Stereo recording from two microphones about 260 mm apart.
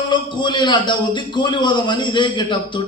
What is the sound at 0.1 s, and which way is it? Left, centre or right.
A man's voice, centre.